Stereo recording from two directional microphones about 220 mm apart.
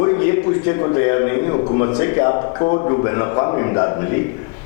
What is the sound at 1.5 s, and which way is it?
Speech, 30° left (ahead or behind).